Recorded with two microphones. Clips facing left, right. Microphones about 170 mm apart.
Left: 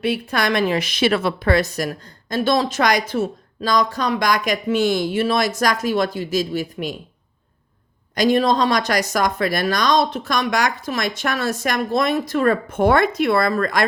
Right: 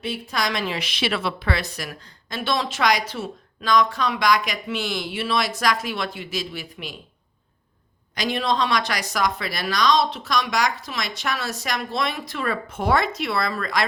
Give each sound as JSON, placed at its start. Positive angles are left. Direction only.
{"t": 0.0, "sound": "a woman's voice", "side_deg": 60}
{"t": 8.1, "sound": "a woman's voice", "side_deg": 45}